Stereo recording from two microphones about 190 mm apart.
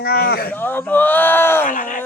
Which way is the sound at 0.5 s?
10° left (ahead or behind).